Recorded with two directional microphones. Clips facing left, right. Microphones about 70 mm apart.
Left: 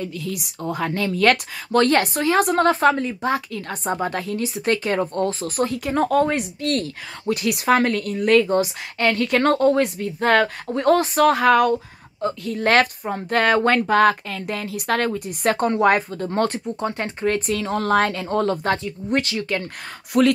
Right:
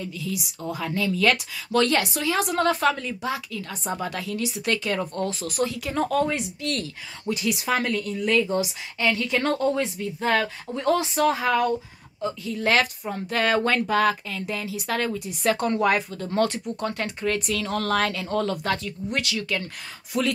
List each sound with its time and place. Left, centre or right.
0.0 s speech: left
12.2 s speech: left
20.1 s speech: left